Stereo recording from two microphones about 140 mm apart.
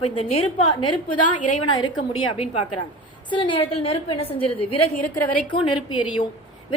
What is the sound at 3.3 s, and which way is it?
A woman's voice, 35° left (ahead or behind).